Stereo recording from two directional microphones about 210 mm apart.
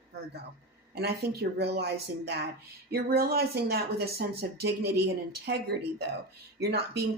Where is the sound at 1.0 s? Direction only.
50° right (ahead or behind).